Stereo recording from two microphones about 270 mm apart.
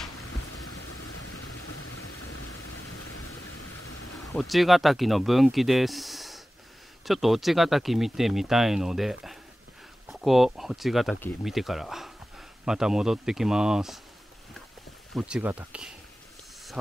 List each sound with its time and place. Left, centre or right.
0.8 s vehicle: left
3.1 s rain: left
3.5 s a sound: left
4.3 s speech: centre
15.1 s speech: centre